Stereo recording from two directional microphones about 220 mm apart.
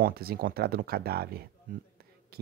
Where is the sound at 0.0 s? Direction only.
45° right (ahead or behind).